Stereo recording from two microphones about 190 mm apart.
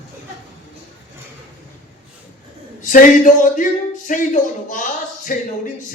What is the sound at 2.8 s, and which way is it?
Speech, 40° left (ahead or behind).